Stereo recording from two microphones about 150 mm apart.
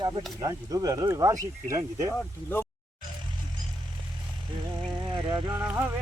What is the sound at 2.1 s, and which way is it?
Speech, 15° left (ahead or behind).